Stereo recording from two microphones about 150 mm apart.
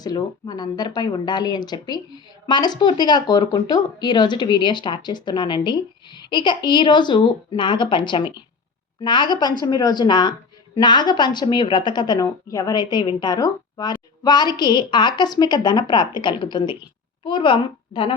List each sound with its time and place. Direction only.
0.0 s a woman's voice: 25° left (ahead or behind)